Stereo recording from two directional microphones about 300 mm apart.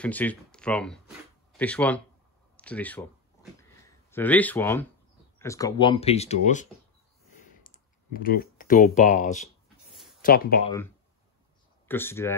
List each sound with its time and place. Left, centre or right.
0.0 s speech: centre; by 9.5 s left
9.8 s a sound: centre
10.2 s speech: left
11.9 s speech: centre